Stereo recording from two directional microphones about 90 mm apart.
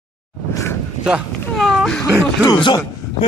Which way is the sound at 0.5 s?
30° left (ahead or behind).